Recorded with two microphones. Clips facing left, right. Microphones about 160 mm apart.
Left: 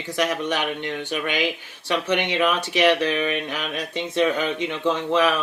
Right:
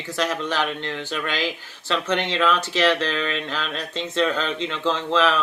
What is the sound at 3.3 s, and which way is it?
Speech, 15° left (ahead or behind).